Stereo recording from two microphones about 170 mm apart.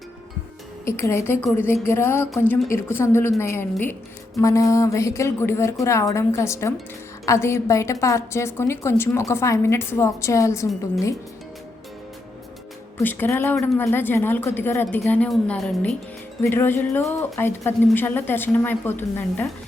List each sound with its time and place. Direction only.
0.9 s a woman's voice: 15° left (ahead or behind)
13.0 s a woman's voice: 10° left (ahead or behind)
16.4 s a woman's voice: 15° left (ahead or behind)